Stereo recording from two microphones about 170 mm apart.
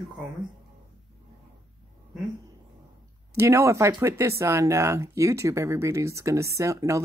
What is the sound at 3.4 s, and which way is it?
Speech, 15° right (ahead or behind).